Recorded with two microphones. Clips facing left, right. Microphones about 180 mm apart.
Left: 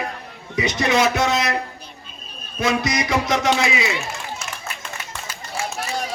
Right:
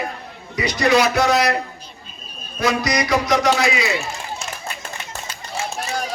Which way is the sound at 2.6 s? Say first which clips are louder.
Right 1 dB; 25° left (ahead or behind).